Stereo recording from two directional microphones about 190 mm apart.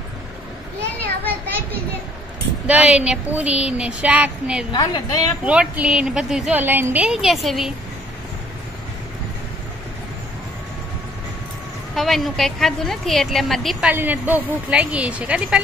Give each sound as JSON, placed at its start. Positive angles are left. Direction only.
{"t": 2.6, "sound": "a woman's voice", "side_deg": -5}
{"t": 4.7, "sound": "a woman's voice", "side_deg": 20}
{"t": 5.4, "sound": "a woman's voice", "side_deg": -5}
{"t": 11.9, "sound": "a woman's voice", "side_deg": 0}